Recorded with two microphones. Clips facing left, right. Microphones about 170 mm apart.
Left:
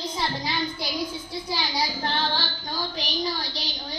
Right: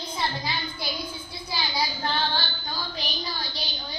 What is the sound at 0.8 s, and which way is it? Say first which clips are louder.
Child singing: left 4 dB; 80° left.